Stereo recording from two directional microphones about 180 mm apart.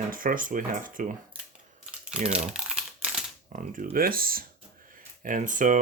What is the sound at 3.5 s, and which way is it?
Speech, 45° right (ahead or behind).